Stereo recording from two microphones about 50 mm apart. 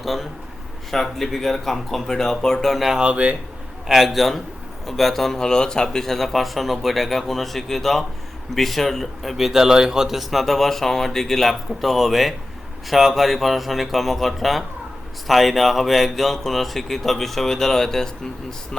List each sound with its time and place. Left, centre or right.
0.0 s a man's voice: centre
3.0 s speech: right
3.8 s speech: centre